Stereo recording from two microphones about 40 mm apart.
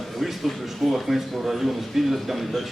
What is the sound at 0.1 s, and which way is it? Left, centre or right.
A man's voice, centre.